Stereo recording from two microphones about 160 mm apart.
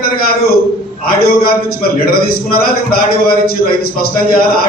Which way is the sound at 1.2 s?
70° left (ahead or behind).